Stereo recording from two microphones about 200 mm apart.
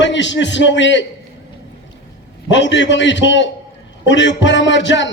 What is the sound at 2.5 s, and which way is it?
A man's voice, 65° left (ahead or behind).